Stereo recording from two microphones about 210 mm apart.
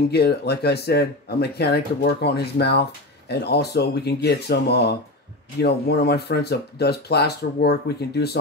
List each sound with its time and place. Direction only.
0.1 s speech: 50° left (ahead or behind)